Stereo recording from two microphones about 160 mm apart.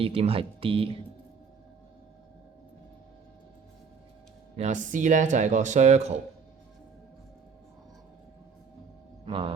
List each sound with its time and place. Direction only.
0.0 s speech: 35° right (ahead or behind)
4.5 s speech: 50° right (ahead or behind)
9.2 s speech: 30° right (ahead or behind)